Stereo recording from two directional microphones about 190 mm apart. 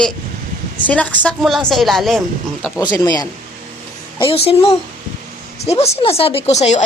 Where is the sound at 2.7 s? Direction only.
20° left (ahead or behind).